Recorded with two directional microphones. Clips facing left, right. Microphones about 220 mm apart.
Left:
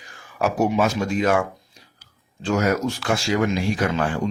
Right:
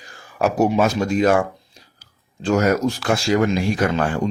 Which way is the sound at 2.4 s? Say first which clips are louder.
Right 3 dB; 45° right (ahead or behind).